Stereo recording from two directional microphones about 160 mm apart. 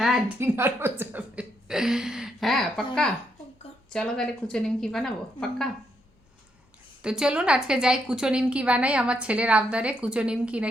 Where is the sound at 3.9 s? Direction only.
5° left (ahead or behind).